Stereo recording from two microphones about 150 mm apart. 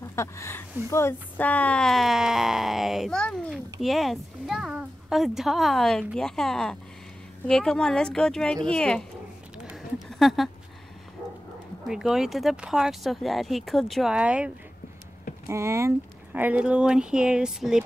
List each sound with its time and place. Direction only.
0.0 s speech: 20° left (ahead or behind)
10.0 s a sound: centre (ahead or behind)
11.9 s speech: 5° right (ahead or behind)
15.4 s speech: 20° right (ahead or behind)
16.3 s speech: 10° right (ahead or behind)